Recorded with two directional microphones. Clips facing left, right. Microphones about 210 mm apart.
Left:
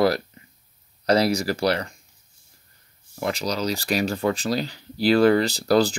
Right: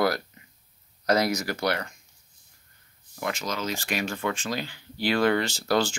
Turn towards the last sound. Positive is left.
turn(degrees=35)  # may be behind; listen again after turning